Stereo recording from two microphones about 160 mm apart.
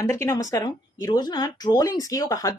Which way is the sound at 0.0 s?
20° left (ahead or behind).